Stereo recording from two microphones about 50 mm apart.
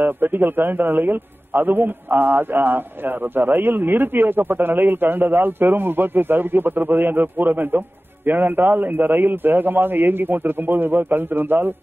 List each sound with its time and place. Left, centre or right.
0.0 s a man's voice: right